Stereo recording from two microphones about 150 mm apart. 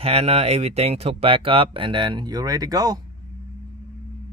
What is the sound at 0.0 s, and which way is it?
Speech, 45° right (ahead or behind).